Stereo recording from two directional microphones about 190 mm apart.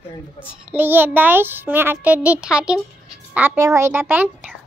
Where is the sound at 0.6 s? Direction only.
10° right (ahead or behind).